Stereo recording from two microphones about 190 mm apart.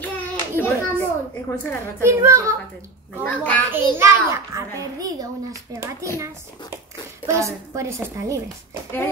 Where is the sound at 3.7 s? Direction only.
15° right (ahead or behind).